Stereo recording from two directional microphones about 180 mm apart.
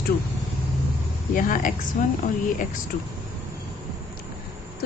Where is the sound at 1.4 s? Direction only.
45° left (ahead or behind).